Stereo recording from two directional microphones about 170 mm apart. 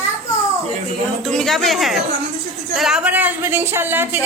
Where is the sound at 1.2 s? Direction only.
5° left (ahead or behind); by 4.2 s 10° right (ahead or behind).